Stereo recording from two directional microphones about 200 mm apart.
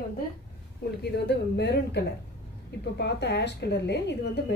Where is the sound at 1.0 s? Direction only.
55° left (ahead or behind).